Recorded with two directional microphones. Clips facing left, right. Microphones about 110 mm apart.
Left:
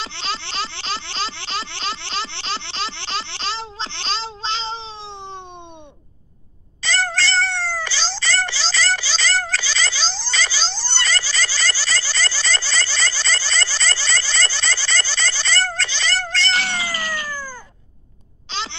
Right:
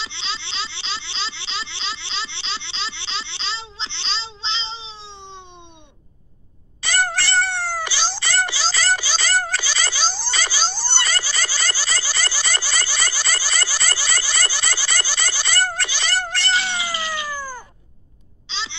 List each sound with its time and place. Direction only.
0.0 s a sound: 50° left (ahead or behind)
6.8 s wail: 15° right (ahead or behind)
16.9 s cat: 45° left (ahead or behind)
17.3 s cat: 15° right (ahead or behind)
18.5 s babbling: 50° left (ahead or behind)